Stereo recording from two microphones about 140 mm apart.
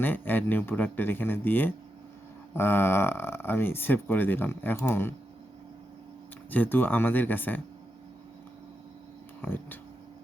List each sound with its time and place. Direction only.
0.0 s speech: 15° left (ahead or behind)
6.5 s speech: 15° left (ahead or behind)
9.4 s speech: 15° left (ahead or behind)